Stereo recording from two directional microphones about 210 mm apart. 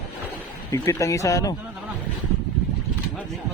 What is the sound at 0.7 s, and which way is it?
Speech, 15° left (ahead or behind).